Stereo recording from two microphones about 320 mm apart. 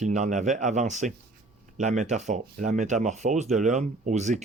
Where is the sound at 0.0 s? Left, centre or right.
Right.